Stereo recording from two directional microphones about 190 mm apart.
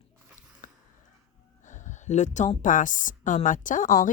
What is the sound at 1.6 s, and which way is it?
A woman's voice, 40° left (ahead or behind).